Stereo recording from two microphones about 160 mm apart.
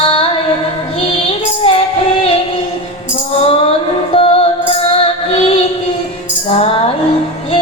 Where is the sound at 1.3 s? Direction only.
35° left (ahead or behind).